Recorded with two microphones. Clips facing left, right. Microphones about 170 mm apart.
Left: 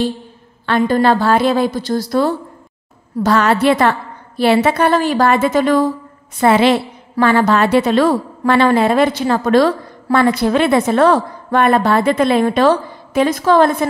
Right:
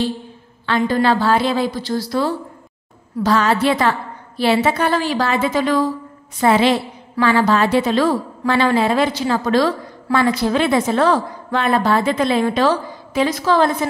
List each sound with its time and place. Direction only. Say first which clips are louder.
0.7 s a woman's voice: left 3 dB; 50° left (ahead or behind)
3.3 s a woman's voice: left 3 dB; 60° left (ahead or behind)
6.4 s a woman's voice: left 3 dB; 65° left (ahead or behind)